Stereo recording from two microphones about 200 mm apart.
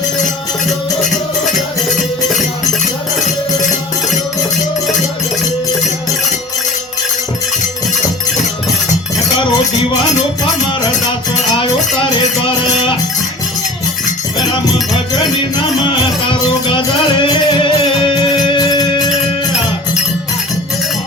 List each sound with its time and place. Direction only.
16.3 s music: 25° left (ahead or behind)